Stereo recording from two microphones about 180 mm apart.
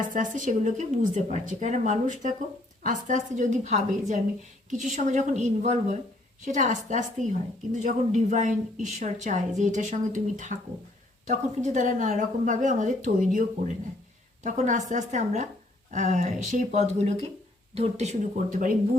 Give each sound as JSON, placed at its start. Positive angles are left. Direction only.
{"t": 0.0, "sound": "a woman's voice", "side_deg": -45}
{"t": 14.4, "sound": "a woman's voice", "side_deg": -45}